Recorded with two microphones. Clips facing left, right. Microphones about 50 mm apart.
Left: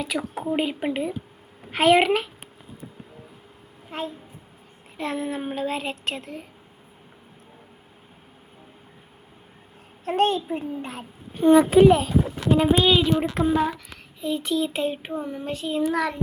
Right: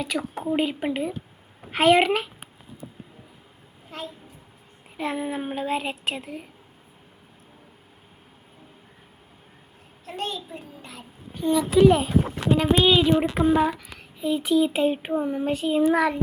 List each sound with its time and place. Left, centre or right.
0.0 s a child's voice: centre
3.9 s a child's voice: left
4.9 s a child's voice: centre
10.1 s a child's voice: left
12.8 s a child's voice: centre
15.8 s a child's voice: right